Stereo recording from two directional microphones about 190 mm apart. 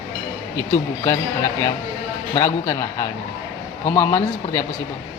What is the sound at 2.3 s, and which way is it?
A man's voice, 15° left (ahead or behind).